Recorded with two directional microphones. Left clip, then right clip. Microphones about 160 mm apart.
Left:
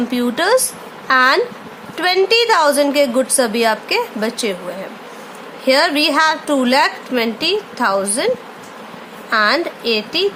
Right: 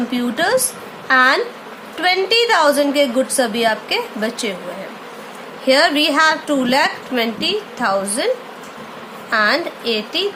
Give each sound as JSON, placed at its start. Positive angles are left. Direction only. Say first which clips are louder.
{"t": 0.1, "sound": "a woman's voice", "louder": "left 2 dB", "side_deg": 30}
{"t": 5.6, "sound": "a woman's voice", "louder": "even", "side_deg": 25}
{"t": 9.3, "sound": "a woman's voice", "louder": "left 1 dB", "side_deg": 25}